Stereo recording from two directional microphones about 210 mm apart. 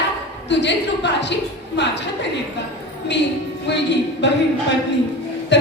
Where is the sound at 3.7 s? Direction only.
55° left (ahead or behind).